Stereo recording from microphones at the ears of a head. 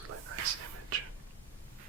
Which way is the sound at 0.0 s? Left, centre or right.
Right.